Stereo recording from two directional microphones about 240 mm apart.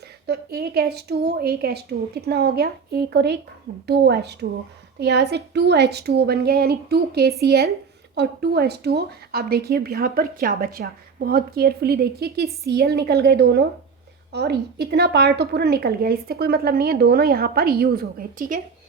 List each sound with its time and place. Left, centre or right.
0.3 s a woman's voice: right